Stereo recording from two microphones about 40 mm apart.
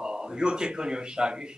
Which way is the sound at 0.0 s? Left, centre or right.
Centre.